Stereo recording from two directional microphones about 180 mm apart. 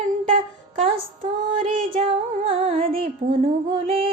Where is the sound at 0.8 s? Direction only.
30° right (ahead or behind).